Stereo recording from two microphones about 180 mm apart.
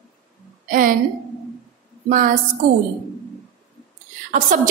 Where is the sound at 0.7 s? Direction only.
50° right (ahead or behind).